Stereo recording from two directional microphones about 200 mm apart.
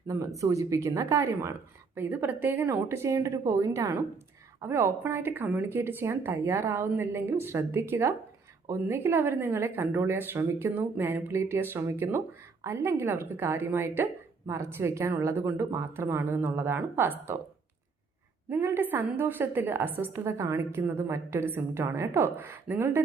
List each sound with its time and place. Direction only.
0.3 s speech: 15° right (ahead or behind)
18.4 s speech: 10° right (ahead or behind)